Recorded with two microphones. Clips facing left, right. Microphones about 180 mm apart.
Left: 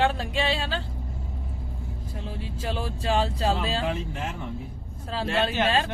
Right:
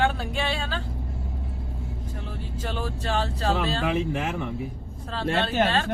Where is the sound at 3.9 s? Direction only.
75° right (ahead or behind).